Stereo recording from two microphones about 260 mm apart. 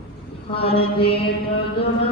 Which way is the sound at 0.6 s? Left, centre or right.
Left.